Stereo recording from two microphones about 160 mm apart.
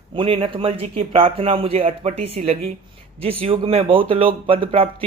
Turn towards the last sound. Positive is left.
turn(degrees=-35)  # may be behind; listen again after turning